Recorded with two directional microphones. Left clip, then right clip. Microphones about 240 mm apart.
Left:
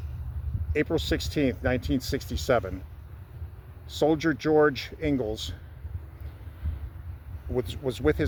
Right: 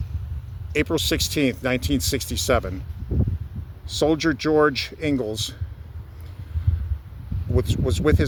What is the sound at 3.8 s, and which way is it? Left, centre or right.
Speech, right.